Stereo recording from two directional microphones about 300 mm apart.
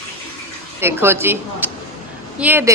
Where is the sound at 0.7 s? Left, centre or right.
Centre.